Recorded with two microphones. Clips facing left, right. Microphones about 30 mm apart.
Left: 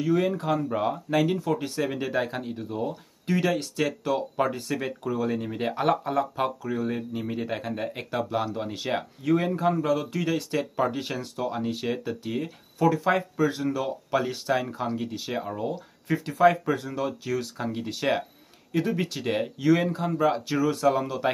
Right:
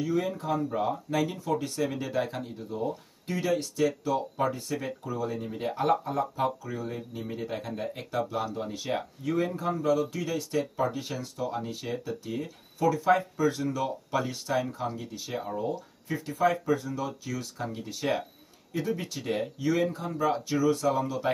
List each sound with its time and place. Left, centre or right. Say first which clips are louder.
0.0 s speech: left 5 dB; left
0.7 s speech: left 3 dB; left
15.7 s speech: left 4 dB; left
18.7 s speech: left 5 dB; left